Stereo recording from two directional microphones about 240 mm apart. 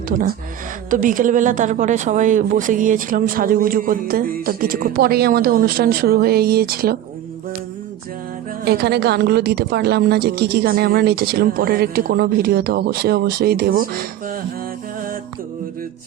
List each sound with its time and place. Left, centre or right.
0.9 s a woman's voice: right
8.6 s a woman's voice: right